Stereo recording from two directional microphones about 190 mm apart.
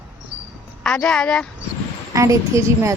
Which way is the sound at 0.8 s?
5° left (ahead or behind).